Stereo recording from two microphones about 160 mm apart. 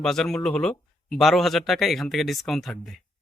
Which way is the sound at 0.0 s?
Centre (ahead or behind).